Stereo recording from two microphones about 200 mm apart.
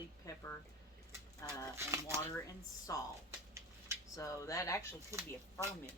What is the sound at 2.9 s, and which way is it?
Speech, 15° left (ahead or behind).